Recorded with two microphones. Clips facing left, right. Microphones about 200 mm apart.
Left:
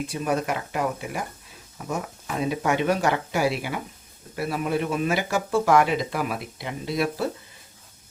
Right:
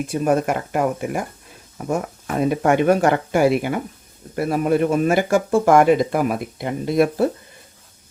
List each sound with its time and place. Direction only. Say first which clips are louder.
0.1 s speech: right 8 dB; 50° right (ahead or behind)